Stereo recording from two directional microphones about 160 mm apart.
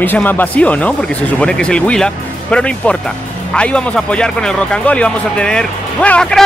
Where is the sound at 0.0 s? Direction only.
10° left (ahead or behind).